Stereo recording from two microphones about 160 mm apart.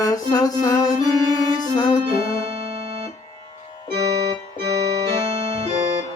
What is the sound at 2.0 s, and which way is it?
Keyboard, 35° right (ahead or behind).